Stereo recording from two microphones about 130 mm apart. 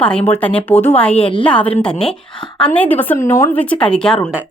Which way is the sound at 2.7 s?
15° left (ahead or behind).